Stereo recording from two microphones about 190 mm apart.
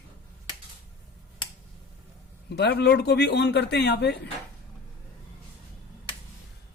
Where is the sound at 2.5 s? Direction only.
60° left (ahead or behind).